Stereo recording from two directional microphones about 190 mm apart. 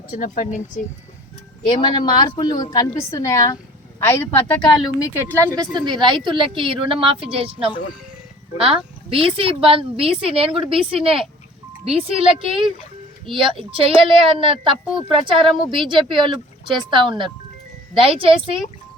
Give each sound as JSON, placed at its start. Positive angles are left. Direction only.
{"t": 0.1, "sound": "speech", "side_deg": 40}
{"t": 1.6, "sound": "a woman's voice", "side_deg": 25}
{"t": 5.7, "sound": "speech", "side_deg": -25}